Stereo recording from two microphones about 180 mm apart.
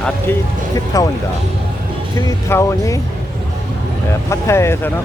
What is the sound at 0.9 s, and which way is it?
Speech, 20° left (ahead or behind).